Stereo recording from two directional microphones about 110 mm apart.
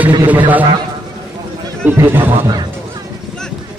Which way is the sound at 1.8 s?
20° right (ahead or behind).